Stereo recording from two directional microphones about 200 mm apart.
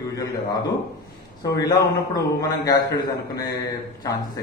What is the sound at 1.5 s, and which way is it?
A man's voice, 20° left (ahead or behind).